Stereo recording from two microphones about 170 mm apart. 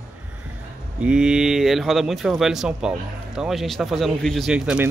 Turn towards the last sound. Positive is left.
turn(degrees=-5)  # may be behind; listen again after turning